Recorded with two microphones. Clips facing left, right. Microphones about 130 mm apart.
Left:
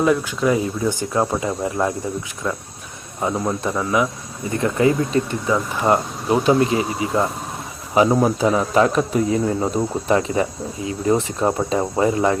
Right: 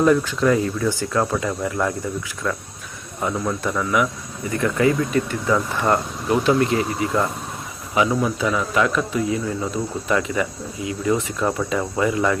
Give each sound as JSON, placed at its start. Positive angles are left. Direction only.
{"t": 0.0, "sound": "speech", "side_deg": 5}
{"t": 7.9, "sound": "speech", "side_deg": 40}